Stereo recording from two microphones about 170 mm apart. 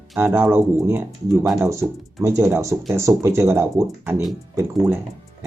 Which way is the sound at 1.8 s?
Centre (ahead or behind).